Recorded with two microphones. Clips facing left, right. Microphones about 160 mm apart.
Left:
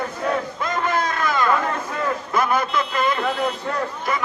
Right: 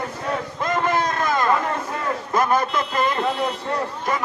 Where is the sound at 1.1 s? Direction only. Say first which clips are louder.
Even; 45° right (ahead or behind).